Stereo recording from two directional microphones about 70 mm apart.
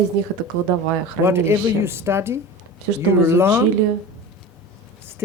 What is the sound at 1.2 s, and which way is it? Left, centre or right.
Speech, right.